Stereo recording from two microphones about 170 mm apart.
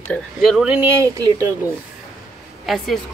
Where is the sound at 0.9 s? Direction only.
20° right (ahead or behind).